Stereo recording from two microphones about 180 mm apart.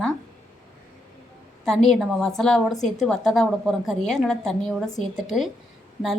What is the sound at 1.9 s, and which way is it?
A woman's voice, centre (ahead or behind).